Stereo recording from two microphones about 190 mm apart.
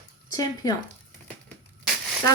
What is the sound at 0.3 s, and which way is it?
Speech, 20° left (ahead or behind).